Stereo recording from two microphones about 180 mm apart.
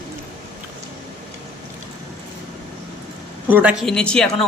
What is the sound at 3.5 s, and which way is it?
Speech, 10° right (ahead or behind).